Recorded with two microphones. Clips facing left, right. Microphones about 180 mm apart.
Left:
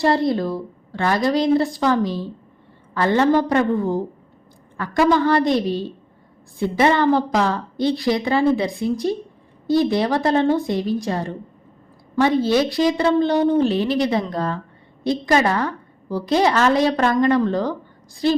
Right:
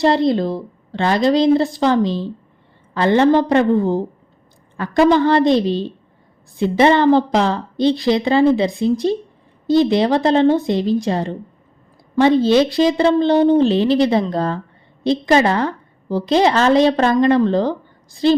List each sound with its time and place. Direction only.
0.0 s a woman's voice: 20° right (ahead or behind)